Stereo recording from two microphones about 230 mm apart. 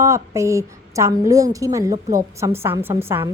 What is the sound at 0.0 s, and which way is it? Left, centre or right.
A woman's voice, centre.